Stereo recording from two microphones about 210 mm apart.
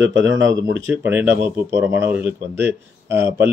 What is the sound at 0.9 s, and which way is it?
Speech, 10° right (ahead or behind).